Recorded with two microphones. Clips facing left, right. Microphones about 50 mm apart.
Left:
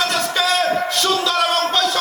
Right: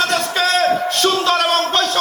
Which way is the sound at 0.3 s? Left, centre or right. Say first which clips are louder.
Right 2 dB; right.